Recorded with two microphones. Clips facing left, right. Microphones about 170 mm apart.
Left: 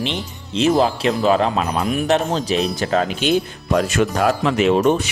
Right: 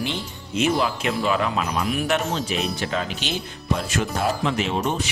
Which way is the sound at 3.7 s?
70° left (ahead or behind).